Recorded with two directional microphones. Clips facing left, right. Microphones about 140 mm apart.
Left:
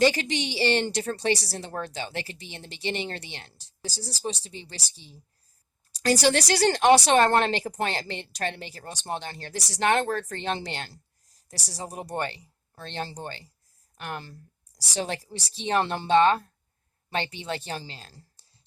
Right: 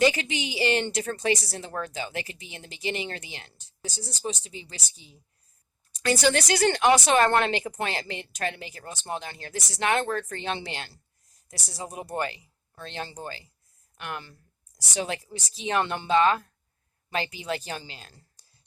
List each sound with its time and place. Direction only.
0.0 s speech: 35° left (ahead or behind)